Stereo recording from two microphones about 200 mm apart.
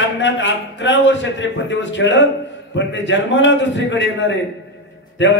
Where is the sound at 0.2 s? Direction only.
65° left (ahead or behind).